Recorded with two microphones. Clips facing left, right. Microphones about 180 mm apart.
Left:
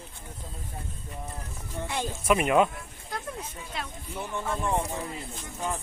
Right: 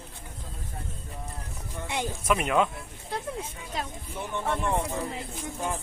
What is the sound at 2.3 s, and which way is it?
Speech, 5° left (ahead or behind).